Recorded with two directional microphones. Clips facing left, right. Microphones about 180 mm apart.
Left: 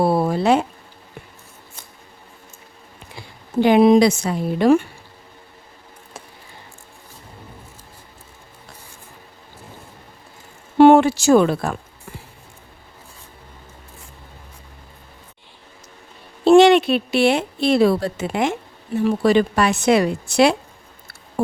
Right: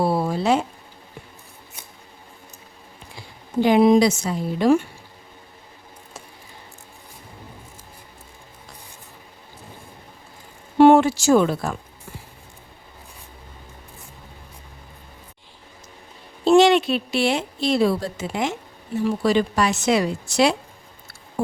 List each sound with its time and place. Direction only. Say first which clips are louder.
0.0 s speech: left 3 dB; 55° left (ahead or behind)
3.6 s a woman's voice: left 2 dB; 65° left (ahead or behind)
10.8 s a sound: left 2 dB; 65° left (ahead or behind)
16.4 s a woman's voice: left 4 dB; 60° left (ahead or behind)